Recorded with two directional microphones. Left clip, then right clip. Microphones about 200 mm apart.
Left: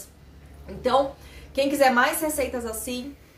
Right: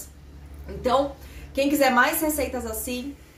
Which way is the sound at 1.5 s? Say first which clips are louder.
Left 1 dB; centre (ahead or behind).